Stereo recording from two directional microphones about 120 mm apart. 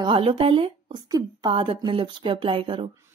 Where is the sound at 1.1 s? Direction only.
30° right (ahead or behind).